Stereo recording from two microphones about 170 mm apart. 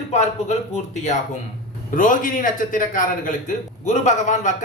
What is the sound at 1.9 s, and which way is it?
A man's voice, 50° left (ahead or behind).